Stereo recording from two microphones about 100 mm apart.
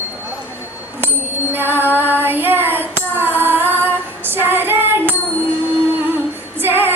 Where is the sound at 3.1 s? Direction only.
20° right (ahead or behind).